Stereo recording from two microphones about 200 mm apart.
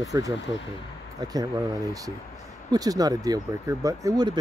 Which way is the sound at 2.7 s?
20° right (ahead or behind).